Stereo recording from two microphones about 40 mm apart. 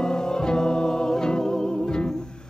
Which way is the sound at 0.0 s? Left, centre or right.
Centre.